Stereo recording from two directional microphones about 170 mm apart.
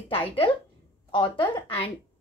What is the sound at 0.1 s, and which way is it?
A woman's voice, 30° left (ahead or behind).